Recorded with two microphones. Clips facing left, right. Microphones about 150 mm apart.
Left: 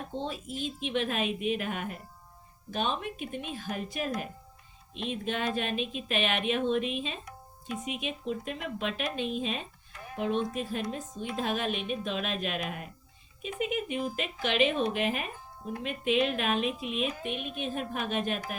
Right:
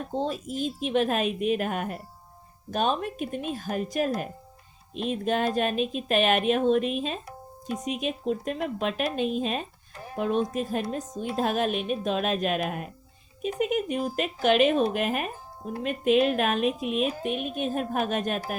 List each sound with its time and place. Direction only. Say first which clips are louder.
0.1 s speech: right 8 dB; 40° right (ahead or behind)